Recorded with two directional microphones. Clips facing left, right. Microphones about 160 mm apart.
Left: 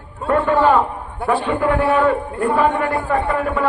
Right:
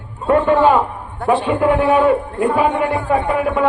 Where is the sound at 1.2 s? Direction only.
10° right (ahead or behind).